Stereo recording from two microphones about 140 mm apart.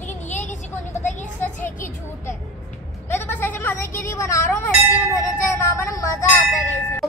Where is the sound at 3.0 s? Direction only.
15° left (ahead or behind).